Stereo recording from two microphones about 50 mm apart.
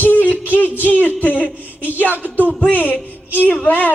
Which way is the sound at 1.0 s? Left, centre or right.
Left.